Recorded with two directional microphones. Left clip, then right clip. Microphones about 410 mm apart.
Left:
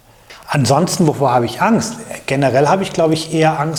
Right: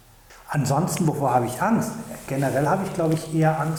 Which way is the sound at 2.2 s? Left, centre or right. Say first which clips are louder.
Left 10 dB; left.